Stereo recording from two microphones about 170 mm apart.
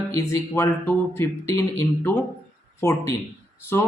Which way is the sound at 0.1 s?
15° left (ahead or behind).